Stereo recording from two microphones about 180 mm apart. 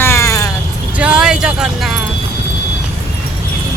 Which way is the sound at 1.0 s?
5° right (ahead or behind).